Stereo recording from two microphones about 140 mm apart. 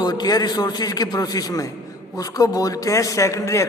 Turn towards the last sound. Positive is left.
turn(degrees=20)  # may be behind; listen again after turning